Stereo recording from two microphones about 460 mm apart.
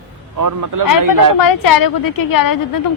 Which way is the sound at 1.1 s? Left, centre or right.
Left.